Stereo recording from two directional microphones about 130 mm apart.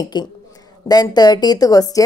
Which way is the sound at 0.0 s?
30° left (ahead or behind).